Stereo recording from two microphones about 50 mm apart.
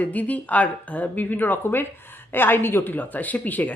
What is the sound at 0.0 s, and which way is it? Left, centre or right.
A woman's voice, left.